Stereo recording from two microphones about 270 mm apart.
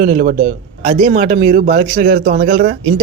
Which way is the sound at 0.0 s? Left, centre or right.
Right.